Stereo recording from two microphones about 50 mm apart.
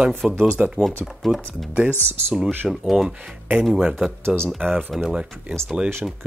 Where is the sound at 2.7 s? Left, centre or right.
Centre.